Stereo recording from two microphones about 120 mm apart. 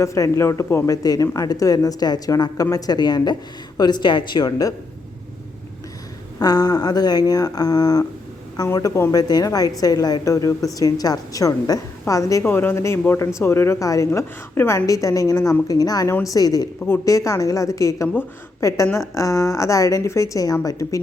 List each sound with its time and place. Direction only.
0.0 s a woman's voice: 25° left (ahead or behind)
6.4 s a woman's voice: 35° left (ahead or behind)